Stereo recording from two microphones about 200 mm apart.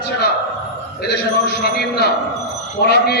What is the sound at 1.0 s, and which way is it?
A man's voice, 55° left (ahead or behind).